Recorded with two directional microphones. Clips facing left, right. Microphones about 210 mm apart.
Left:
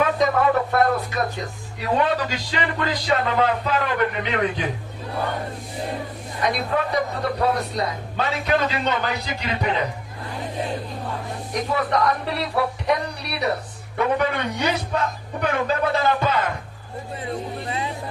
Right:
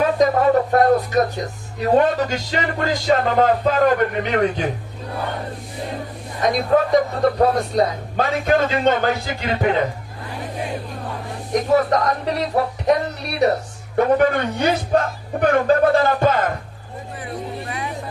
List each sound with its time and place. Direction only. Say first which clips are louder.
0.0 s speech: right 3 dB; 40° right (ahead or behind)
6.4 s a man's voice: right 6 dB; 45° right (ahead or behind)
11.7 s a man's voice: right 4 dB; 45° right (ahead or behind)
17.7 s a sound: left 1 dB; 25° left (ahead or behind)